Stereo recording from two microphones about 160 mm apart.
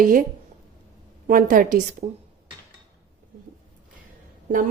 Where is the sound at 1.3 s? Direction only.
60° right (ahead or behind).